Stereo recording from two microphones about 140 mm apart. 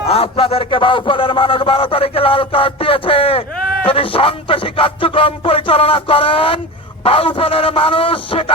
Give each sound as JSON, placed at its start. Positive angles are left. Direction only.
{"t": 0.1, "sound": "speech", "side_deg": 40}